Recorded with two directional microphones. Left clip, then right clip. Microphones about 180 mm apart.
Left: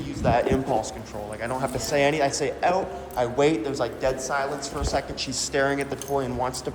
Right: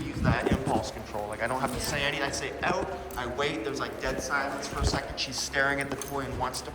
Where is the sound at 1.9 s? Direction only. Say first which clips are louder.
Left 11 dB; 30° left (ahead or behind).